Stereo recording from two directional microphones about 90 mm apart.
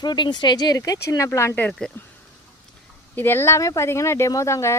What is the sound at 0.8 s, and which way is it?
Speech, 40° left (ahead or behind).